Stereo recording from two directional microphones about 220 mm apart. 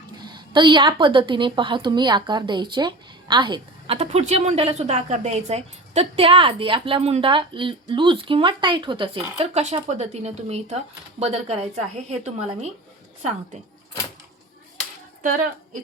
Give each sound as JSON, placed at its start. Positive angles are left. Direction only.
{"t": 0.3, "sound": "a woman's voice", "side_deg": -20}
{"t": 15.2, "sound": "a woman's voice", "side_deg": -35}